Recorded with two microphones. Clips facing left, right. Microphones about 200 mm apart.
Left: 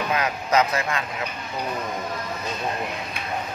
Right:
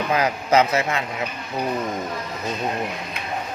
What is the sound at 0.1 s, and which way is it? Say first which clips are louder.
Speech: right 4 dB; 30° right (ahead or behind).